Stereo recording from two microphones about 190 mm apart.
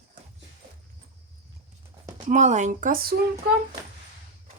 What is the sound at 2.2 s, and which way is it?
Speech, 40° right (ahead or behind).